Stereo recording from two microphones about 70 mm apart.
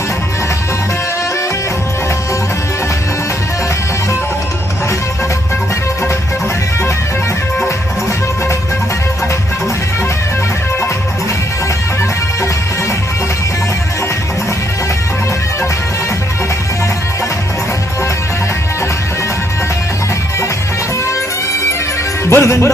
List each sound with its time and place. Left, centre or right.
22.3 s music: left